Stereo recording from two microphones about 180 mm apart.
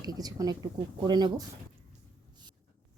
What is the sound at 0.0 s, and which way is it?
Speech, 20° right (ahead or behind).